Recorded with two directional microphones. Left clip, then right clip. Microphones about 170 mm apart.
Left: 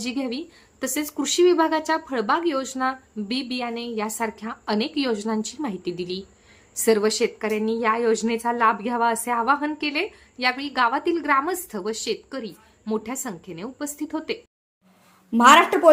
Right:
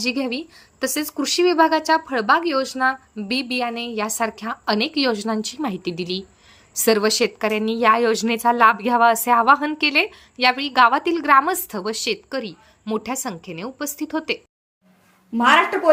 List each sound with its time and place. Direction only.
0.0 s a woman's voice: 20° right (ahead or behind)
15.3 s a woman's voice: 45° left (ahead or behind)